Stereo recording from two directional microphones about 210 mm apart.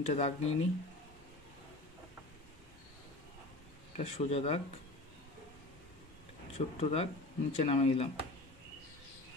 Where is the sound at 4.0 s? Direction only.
30° left (ahead or behind).